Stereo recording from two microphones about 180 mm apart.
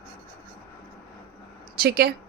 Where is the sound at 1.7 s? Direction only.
60° right (ahead or behind).